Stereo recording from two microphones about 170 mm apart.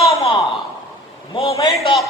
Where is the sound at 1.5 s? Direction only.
20° left (ahead or behind).